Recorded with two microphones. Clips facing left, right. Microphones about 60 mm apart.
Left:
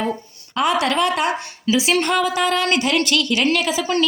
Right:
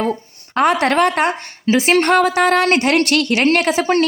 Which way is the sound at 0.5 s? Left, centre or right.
Right.